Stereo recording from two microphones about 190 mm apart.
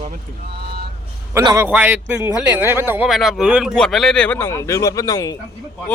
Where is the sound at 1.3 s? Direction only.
15° right (ahead or behind).